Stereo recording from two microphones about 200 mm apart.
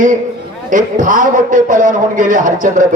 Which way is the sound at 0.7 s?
40° right (ahead or behind).